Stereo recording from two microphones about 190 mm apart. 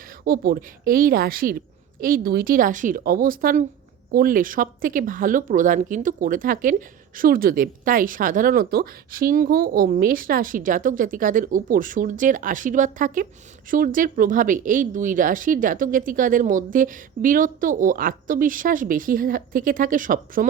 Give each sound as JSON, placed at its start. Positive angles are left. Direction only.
{"t": 0.3, "sound": "speech", "side_deg": -50}